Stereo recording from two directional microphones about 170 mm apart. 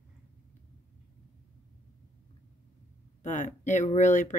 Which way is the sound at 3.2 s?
45° left (ahead or behind).